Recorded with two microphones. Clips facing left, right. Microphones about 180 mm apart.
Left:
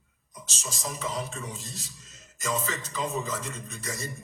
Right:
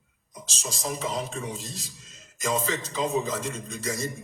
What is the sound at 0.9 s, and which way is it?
Music, 30° right (ahead or behind).